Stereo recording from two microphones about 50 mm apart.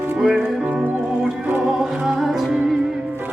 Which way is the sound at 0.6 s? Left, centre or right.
Right.